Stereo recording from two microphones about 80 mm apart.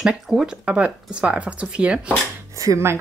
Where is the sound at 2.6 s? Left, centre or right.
Right.